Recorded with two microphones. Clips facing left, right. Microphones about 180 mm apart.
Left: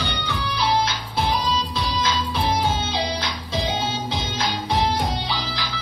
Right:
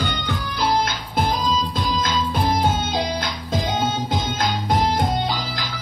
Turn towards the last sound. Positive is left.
turn(degrees=-50)  # may be behind; listen again after turning